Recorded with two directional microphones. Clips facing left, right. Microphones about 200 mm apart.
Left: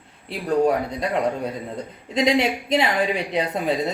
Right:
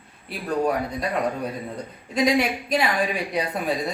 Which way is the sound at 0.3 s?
25° left (ahead or behind).